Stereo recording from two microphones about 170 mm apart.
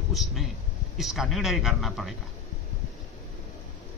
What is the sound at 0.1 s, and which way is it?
A man's voice, centre (ahead or behind).